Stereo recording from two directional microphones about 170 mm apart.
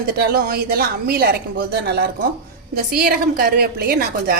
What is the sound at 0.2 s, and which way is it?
Speech, 60° right (ahead or behind).